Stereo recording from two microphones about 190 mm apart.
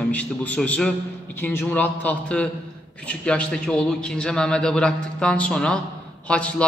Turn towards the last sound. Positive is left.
turn(degrees=5)  # may be behind; listen again after turning